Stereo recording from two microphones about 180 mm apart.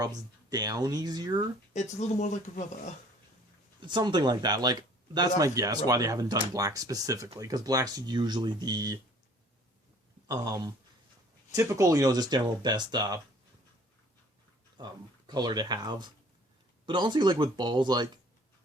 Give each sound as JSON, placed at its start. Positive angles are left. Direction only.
{"t": 0.0, "sound": "speech", "side_deg": -20}
{"t": 1.7, "sound": "speech", "side_deg": 40}
{"t": 3.8, "sound": "speech", "side_deg": -25}
{"t": 10.2, "sound": "speech", "side_deg": -20}
{"t": 14.8, "sound": "speech", "side_deg": -25}